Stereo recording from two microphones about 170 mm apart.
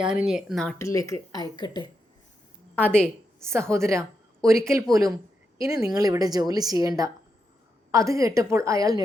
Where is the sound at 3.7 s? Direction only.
15° right (ahead or behind).